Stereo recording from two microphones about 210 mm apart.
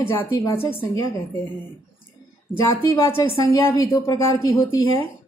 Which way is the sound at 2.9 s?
10° left (ahead or behind).